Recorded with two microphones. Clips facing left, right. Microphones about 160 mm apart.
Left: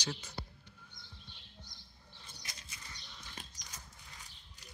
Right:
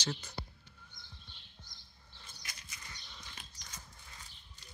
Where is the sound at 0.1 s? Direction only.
Centre (ahead or behind).